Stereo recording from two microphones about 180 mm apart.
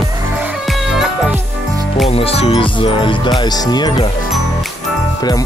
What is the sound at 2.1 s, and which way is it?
Speech, 30° left (ahead or behind).